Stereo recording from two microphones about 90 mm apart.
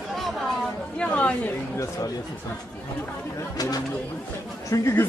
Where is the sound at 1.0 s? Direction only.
15° left (ahead or behind).